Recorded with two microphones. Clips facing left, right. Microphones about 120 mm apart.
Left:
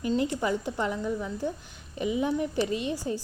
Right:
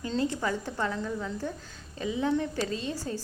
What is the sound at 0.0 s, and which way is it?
A woman's voice, 15° left (ahead or behind).